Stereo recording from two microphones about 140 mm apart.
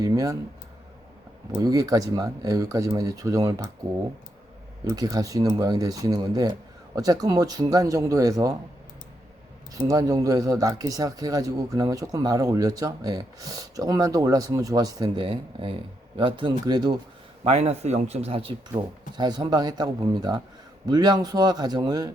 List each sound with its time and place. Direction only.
0.0 s speech: 25° right (ahead or behind)
1.5 s speech: 25° right (ahead or behind)
4.9 s speech: 25° right (ahead or behind)
9.7 s speech: 25° right (ahead or behind)
17.4 s a man's voice: 45° right (ahead or behind)
18.7 s speech: 30° right (ahead or behind)